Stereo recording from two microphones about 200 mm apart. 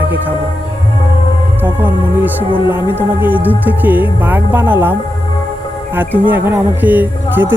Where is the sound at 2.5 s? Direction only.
20° left (ahead or behind).